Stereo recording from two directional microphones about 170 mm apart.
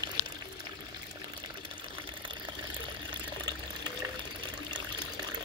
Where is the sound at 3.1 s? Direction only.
25° right (ahead or behind).